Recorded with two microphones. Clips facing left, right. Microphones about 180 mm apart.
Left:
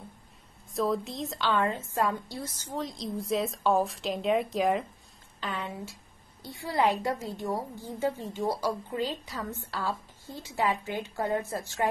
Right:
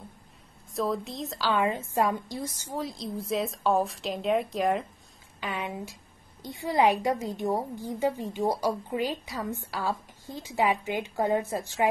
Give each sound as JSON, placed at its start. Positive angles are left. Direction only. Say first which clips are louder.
{"t": 0.7, "sound": "a woman's voice", "louder": "left 1 dB", "side_deg": 0}
{"t": 1.5, "sound": "a woman's voice", "louder": "right 2 dB", "side_deg": -15}
{"t": 5.4, "sound": "a woman's voice", "louder": "right 2 dB", "side_deg": -15}